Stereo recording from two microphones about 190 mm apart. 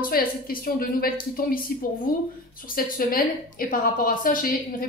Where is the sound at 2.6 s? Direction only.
50° left (ahead or behind).